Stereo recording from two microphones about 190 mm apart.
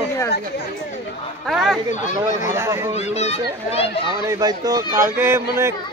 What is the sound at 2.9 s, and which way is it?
Speech, 35° left (ahead or behind).